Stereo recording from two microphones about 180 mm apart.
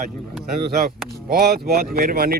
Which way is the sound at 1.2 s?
60° right (ahead or behind).